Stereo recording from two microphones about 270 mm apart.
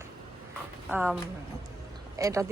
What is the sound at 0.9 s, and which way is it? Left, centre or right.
Speech, centre.